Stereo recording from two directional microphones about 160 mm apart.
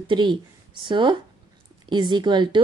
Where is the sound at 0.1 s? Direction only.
30° right (ahead or behind).